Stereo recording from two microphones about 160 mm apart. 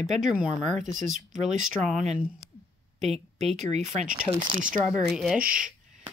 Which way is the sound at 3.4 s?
45° right (ahead or behind).